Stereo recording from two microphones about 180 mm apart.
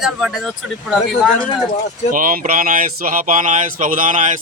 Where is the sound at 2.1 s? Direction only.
50° right (ahead or behind).